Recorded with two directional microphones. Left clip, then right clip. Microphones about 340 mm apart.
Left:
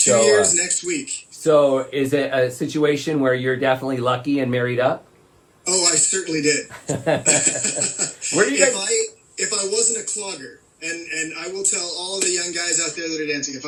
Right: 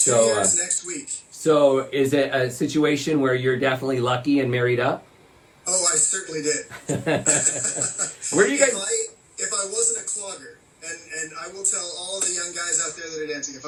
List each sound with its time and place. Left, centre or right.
0.3 s speech: left
1.5 s speech: centre
5.6 s a sound: left
6.8 s speech: centre
7.3 s speech: left
8.8 s music: left
11.3 s a man's voice: left